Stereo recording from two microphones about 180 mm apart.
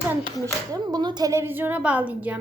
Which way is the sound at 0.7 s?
20° right (ahead or behind).